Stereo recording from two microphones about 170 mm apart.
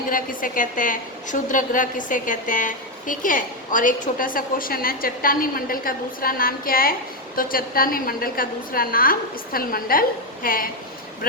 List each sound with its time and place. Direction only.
0.1 s a woman's voice: 55° left (ahead or behind)